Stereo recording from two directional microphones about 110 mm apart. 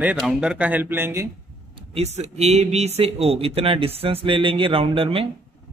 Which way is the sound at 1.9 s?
80° right.